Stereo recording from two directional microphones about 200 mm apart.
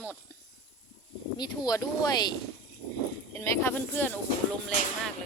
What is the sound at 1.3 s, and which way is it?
Speech, 20° left (ahead or behind).